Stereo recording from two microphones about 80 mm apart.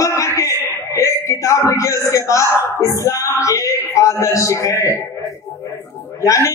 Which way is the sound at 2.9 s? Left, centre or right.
Left.